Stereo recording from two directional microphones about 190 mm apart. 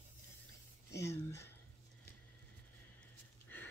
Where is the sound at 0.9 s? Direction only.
15° left (ahead or behind).